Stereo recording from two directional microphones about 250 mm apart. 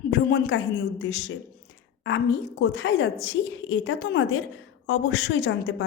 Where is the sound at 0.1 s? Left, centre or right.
Left.